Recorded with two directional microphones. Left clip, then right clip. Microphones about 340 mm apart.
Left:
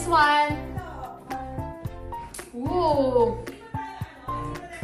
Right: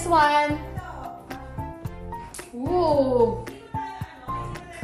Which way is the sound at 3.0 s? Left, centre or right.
Centre.